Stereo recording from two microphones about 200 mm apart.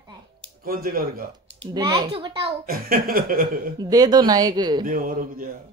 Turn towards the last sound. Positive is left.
turn(degrees=-45)  # may be behind; listen again after turning